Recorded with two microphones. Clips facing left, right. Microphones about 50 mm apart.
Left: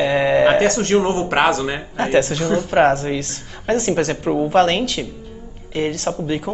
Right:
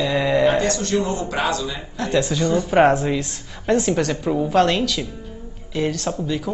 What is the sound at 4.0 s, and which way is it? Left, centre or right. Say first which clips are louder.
Speech: left 2 dB; left.